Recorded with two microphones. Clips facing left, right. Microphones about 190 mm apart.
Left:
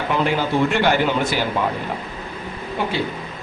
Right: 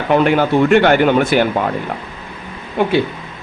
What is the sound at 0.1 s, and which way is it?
A man's voice, 60° right (ahead or behind).